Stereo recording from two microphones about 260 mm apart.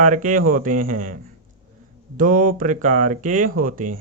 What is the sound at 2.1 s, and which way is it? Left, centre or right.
Speech, right.